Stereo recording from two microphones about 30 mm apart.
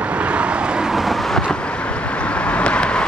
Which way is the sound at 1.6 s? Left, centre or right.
Left.